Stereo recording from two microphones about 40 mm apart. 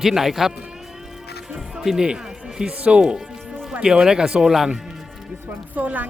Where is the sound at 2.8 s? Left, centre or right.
Right.